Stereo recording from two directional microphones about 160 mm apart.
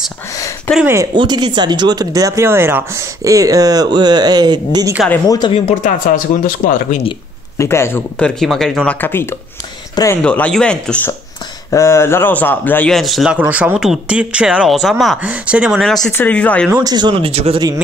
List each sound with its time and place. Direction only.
1.1 s speech: 25° right (ahead or behind)
5.3 s speech: 30° left (ahead or behind)
5.8 s speech: 55° left (ahead or behind)
7.5 s speech: 15° left (ahead or behind)
8.2 s speech: 5° left (ahead or behind)
11.7 s speech: 20° left (ahead or behind)
16.8 s speech: 25° right (ahead or behind)